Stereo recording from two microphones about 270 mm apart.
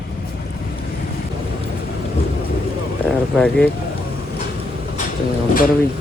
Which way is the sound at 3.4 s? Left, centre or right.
Centre.